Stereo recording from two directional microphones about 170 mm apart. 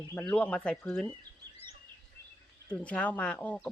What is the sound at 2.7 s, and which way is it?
Speech, 10° left (ahead or behind).